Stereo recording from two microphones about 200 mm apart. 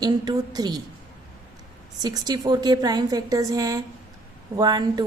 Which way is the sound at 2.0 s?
20° right (ahead or behind).